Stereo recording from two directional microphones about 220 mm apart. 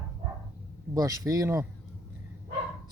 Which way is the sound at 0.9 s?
15° right (ahead or behind).